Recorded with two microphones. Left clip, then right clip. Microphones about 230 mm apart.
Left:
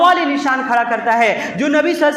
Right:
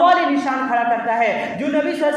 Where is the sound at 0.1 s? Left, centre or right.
Left.